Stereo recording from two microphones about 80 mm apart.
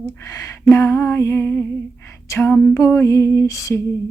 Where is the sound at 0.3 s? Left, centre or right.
Left.